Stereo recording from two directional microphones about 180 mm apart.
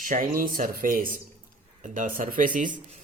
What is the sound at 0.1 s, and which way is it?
Speech, 50° right (ahead or behind).